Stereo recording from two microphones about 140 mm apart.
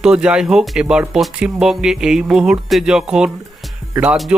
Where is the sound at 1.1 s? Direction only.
Centre (ahead or behind).